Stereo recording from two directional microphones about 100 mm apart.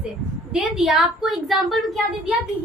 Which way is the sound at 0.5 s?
5° right (ahead or behind).